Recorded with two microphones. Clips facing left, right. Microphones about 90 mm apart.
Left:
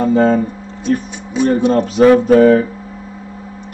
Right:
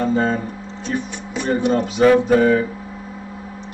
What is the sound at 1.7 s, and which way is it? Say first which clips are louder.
Speech: left 3 dB; 55° left (ahead or behind).